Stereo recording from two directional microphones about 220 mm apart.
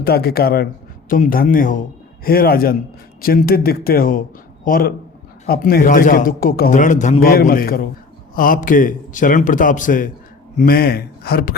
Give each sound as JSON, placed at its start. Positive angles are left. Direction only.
{"t": 0.0, "sound": "a man's voice", "side_deg": 45}